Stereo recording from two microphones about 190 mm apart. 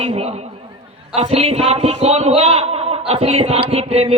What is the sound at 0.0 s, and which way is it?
A man's voice, 35° right (ahead or behind).